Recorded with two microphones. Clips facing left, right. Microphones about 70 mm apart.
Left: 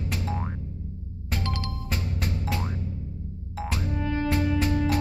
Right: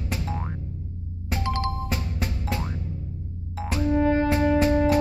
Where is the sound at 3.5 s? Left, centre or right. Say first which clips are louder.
Right 3 dB; centre.